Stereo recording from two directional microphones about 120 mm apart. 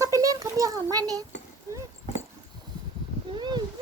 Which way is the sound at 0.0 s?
30° right (ahead or behind).